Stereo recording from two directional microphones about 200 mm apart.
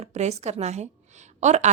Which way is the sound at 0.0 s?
35° right (ahead or behind).